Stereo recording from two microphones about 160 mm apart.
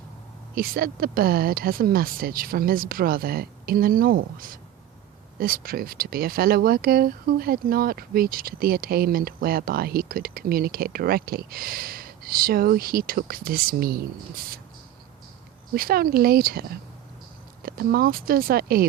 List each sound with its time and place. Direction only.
0.5 s speech: 65° right (ahead or behind)
15.7 s speech: 70° right (ahead or behind)